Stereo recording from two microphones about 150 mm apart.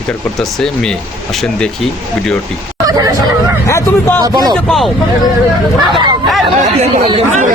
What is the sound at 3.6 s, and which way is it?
Speech, 15° left (ahead or behind).